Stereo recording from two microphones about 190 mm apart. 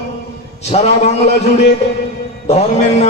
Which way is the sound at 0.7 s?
35° left (ahead or behind).